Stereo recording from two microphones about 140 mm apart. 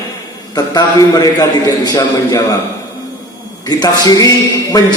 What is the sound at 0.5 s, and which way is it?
A man's voice, 30° left (ahead or behind).